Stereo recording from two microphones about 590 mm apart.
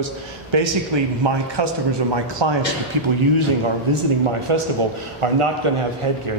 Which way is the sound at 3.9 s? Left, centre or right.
Right.